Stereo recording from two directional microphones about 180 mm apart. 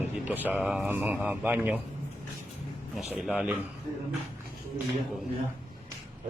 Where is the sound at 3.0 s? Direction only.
Centre (ahead or behind).